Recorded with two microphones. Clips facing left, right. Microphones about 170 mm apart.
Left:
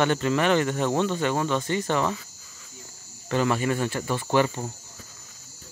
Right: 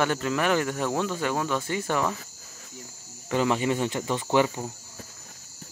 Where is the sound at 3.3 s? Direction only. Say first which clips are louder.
Even; 15° right (ahead or behind).